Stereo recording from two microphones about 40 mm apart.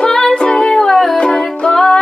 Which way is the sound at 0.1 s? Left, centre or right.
Centre.